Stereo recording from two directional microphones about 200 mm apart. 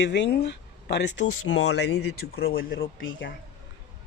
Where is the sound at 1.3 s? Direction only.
75° left (ahead or behind); by 2.8 s 45° left (ahead or behind).